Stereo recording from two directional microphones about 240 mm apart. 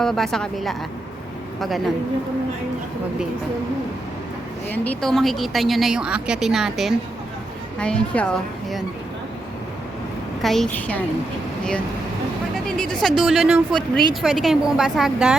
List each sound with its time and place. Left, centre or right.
0.0 s speech: centre
4.7 s speech: centre
10.4 s speech: centre
12.6 s speech: centre